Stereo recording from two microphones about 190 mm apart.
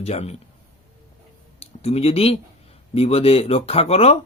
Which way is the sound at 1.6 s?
30° left (ahead or behind).